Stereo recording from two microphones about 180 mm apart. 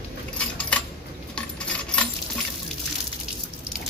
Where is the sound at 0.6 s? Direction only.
5° left (ahead or behind).